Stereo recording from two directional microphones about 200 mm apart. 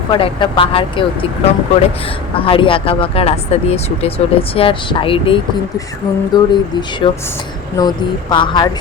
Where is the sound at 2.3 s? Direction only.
25° left (ahead or behind).